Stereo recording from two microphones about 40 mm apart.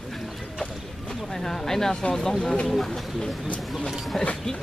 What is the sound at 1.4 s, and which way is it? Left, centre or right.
Speech, centre.